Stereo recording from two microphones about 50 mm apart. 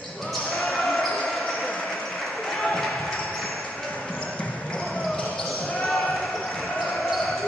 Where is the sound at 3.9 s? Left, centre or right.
Centre.